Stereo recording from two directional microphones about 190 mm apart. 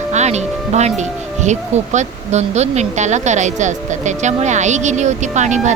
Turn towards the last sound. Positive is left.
turn(degrees=-40)  # may be behind; listen again after turning